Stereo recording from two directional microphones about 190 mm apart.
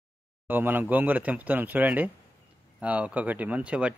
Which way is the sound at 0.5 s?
10° right (ahead or behind).